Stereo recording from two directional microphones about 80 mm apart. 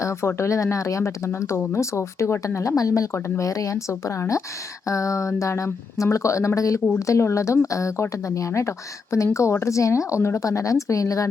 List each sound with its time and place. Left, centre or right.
0.0 s speech: left